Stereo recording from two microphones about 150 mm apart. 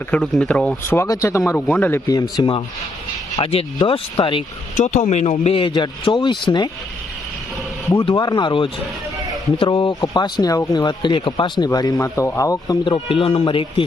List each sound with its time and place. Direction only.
0.1 s speech: 5° left (ahead or behind)
0.9 s speech: 20° left (ahead or behind)
2.3 s speech: 30° left (ahead or behind)
4.8 s speech: 55° left (ahead or behind); by 6.7 s 30° left (ahead or behind)
7.9 s speech: 30° left (ahead or behind)